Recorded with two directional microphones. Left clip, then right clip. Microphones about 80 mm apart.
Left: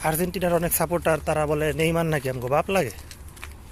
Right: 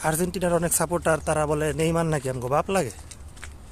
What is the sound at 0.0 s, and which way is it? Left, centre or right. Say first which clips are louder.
Speech: left 1 dB; right.